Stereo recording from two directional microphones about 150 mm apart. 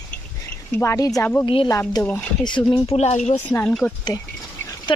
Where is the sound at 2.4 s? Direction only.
30° left (ahead or behind).